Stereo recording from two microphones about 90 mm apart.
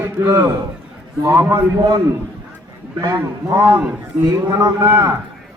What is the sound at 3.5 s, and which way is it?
Speech, 25° right (ahead or behind).